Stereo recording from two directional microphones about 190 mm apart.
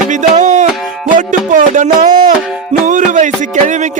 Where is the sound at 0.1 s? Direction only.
40° right (ahead or behind).